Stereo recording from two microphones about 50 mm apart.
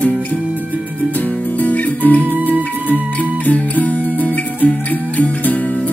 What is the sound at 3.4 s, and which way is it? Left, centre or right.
Music, left.